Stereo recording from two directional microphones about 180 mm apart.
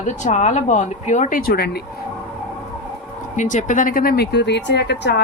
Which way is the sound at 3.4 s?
45° left (ahead or behind).